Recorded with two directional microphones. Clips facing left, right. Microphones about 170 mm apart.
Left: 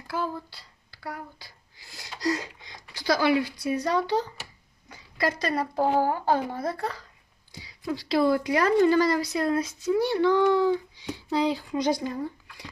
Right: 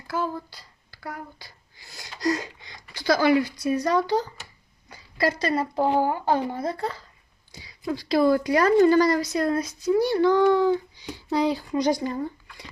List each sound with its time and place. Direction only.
0.1 s a woman's voice: 45° right (ahead or behind)
1.9 s a sound: 50° right (ahead or behind)
3.1 s a woman's voice: 45° right (ahead or behind)
5.1 s speech: 30° right (ahead or behind)
7.6 s a woman's voice: 45° right (ahead or behind)